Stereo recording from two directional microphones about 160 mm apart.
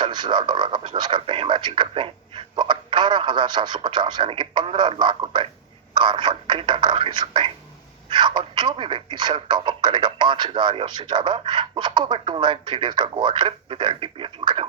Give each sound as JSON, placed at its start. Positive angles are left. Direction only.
{"t": 0.0, "sound": "speech", "side_deg": -30}